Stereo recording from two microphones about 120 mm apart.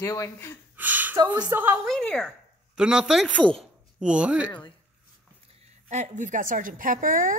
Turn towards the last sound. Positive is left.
turn(degrees=-90)